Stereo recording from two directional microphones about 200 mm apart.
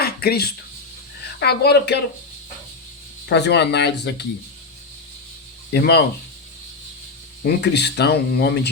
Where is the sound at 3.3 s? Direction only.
55° left (ahead or behind).